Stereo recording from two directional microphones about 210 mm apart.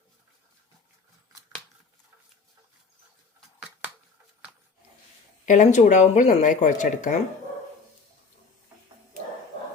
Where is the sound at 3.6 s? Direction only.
10° right (ahead or behind).